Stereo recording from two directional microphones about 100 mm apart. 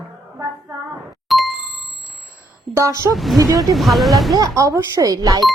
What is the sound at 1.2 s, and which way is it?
Ding, centre (ahead or behind).